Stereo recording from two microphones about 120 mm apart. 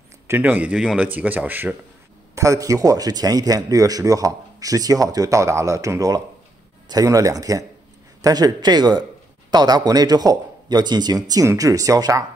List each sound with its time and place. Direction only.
0.3 s speech: 15° right (ahead or behind)
2.3 s speech: 25° right (ahead or behind)